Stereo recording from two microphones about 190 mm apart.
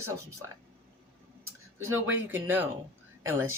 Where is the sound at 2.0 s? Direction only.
10° right (ahead or behind).